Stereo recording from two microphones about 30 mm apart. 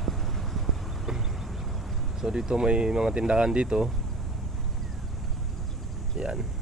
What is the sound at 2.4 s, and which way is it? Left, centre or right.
Speech, right.